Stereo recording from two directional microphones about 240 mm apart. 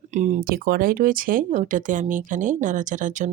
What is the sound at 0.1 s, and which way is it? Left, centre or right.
Speech, right.